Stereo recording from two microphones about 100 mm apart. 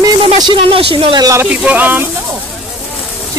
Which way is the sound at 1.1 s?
40° right (ahead or behind).